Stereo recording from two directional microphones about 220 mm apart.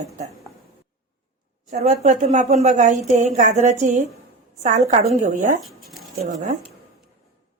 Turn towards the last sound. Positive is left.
turn(degrees=-35)  # may be behind; listen again after turning